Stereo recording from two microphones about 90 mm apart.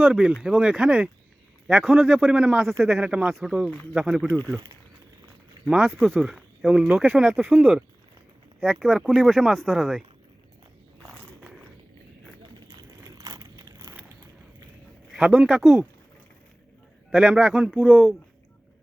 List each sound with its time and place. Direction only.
0.0 s a man's voice: 10° right (ahead or behind)
2.6 s speech: centre (ahead or behind)
3.0 s a man's voice: 10° right (ahead or behind)
4.3 s speech: 15° left (ahead or behind)
5.6 s a man's voice: 15° right (ahead or behind)
6.0 s speech: 5° left (ahead or behind)
6.2 s a man's voice: 5° right (ahead or behind)
8.6 s speech: centre (ahead or behind)
13.1 s a sound: 40° right (ahead or behind)
15.1 s speech: 10° right (ahead or behind)
17.2 s a man's voice: 15° right (ahead or behind)